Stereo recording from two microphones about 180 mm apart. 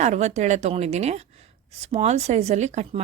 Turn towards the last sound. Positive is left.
turn(degrees=-40)  # may be behind; listen again after turning